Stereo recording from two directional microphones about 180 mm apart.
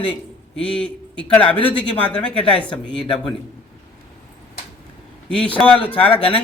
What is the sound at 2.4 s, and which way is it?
Speech, 5° left (ahead or behind).